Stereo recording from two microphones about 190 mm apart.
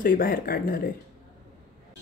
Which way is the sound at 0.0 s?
50° left (ahead or behind).